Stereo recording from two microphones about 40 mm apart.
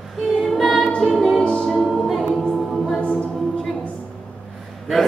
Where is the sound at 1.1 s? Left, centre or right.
Centre.